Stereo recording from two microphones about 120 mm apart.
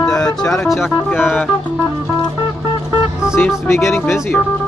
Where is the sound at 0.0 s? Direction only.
5° left (ahead or behind).